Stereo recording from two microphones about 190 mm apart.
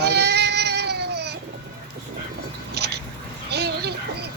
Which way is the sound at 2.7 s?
60° right (ahead or behind).